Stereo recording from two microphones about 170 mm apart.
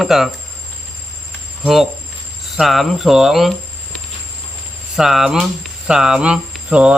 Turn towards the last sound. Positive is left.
turn(degrees=-5)  # may be behind; listen again after turning